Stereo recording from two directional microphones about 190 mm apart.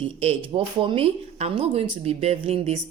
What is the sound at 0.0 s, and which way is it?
Speech, 30° right (ahead or behind).